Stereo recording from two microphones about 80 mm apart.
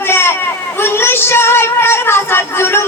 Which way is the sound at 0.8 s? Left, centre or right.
Left.